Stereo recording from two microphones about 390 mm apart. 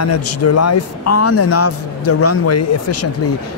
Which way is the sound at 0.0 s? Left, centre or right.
Left.